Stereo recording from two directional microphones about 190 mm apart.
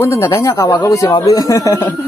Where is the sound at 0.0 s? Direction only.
15° left (ahead or behind).